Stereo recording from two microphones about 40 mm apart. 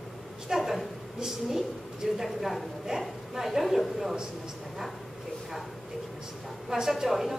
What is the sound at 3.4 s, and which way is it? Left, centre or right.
Speech, centre.